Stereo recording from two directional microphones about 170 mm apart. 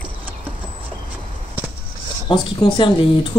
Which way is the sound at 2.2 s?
30° left (ahead or behind).